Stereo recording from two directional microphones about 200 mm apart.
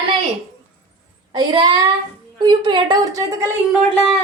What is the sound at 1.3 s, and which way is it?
Child singing, 20° right (ahead or behind).